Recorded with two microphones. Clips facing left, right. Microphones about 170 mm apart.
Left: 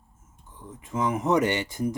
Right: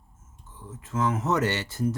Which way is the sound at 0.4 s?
15° left (ahead or behind).